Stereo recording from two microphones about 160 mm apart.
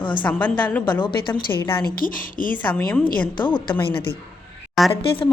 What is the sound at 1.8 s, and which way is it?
Speech, 60° left (ahead or behind).